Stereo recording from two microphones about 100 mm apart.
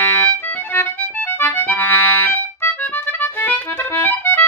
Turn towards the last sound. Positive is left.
turn(degrees=20)  # may be behind; listen again after turning